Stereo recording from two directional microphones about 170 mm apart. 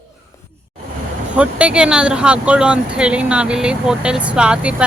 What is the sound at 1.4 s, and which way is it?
Speech, 5° right (ahead or behind).